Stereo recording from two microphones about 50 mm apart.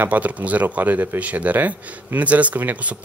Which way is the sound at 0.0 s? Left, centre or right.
Right.